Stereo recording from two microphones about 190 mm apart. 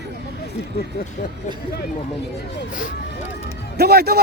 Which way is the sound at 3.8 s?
55° right (ahead or behind).